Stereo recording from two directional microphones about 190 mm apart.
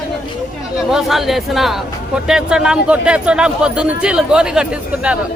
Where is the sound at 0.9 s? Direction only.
Centre (ahead or behind).